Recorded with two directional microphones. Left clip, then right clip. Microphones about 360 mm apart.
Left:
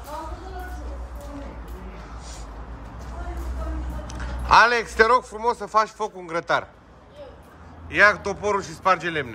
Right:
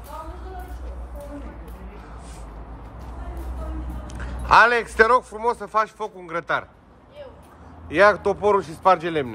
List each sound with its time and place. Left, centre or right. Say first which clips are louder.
4.1 s a man's voice: right 1 dB; centre
7.9 s a man's voice: right 1 dB; centre